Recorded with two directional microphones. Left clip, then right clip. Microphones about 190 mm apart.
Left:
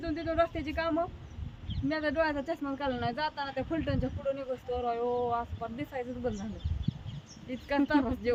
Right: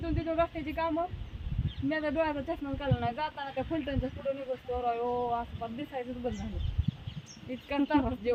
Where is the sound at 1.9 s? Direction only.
15° left (ahead or behind).